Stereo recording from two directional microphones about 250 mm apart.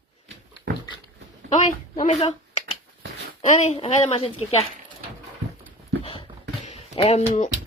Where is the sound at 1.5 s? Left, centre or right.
Left.